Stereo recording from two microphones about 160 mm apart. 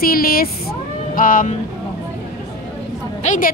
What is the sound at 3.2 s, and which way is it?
Speech, 60° left (ahead or behind).